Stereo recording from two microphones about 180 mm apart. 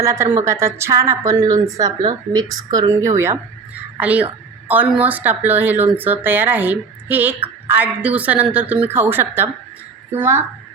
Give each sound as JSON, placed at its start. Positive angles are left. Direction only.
{"t": 0.0, "sound": "speech", "side_deg": -15}